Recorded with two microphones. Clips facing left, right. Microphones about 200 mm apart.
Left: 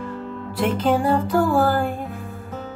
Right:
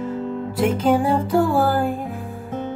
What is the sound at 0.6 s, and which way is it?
Music, 10° right (ahead or behind).